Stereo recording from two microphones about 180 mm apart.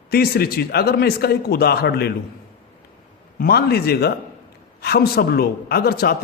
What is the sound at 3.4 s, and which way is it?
A man's voice, 60° left (ahead or behind).